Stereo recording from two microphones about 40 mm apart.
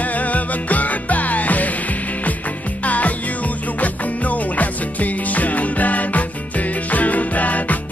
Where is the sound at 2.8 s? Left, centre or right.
Left.